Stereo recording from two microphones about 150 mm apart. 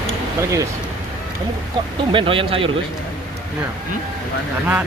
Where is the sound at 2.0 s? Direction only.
35° right (ahead or behind).